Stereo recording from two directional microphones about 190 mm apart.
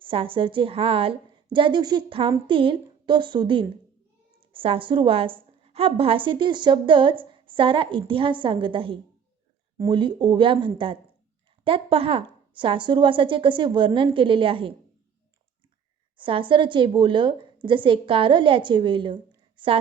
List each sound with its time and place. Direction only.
0.0 s a woman's voice: 30° right (ahead or behind)
16.1 s a woman's voice: 25° right (ahead or behind)